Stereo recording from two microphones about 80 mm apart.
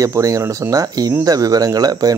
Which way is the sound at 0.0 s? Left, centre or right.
Right.